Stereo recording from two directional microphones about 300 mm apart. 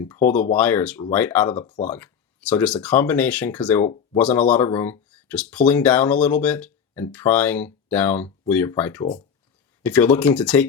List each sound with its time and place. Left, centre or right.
0.0 s speech: centre
0.3 s speech: left
0.5 s speech: centre
9.8 s speech: centre